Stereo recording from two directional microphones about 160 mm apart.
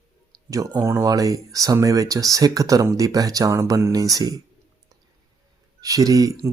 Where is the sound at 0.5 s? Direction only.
20° right (ahead or behind).